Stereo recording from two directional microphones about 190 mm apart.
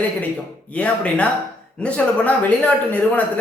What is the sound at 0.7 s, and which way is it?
Speech, 5° left (ahead or behind).